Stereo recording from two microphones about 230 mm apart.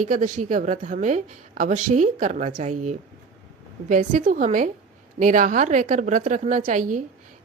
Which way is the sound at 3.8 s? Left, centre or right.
Right.